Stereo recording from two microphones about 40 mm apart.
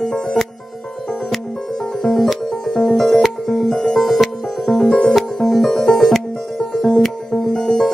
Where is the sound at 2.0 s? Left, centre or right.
Centre.